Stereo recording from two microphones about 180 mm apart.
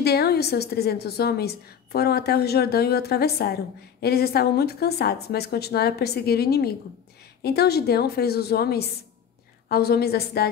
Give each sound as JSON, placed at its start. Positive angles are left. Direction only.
{"t": 0.0, "sound": "a woman's voice", "side_deg": 60}